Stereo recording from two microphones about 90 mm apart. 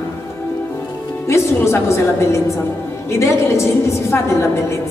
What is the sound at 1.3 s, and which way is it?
A woman's voice, 30° left (ahead or behind).